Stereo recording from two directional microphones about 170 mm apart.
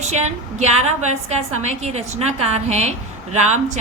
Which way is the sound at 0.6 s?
40° right (ahead or behind).